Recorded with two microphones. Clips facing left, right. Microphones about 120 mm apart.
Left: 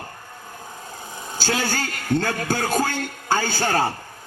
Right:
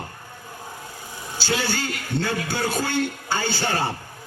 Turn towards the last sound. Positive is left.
turn(degrees=45)  # may be behind; listen again after turning